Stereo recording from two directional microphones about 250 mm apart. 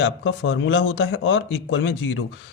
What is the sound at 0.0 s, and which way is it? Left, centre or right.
A man's voice, left.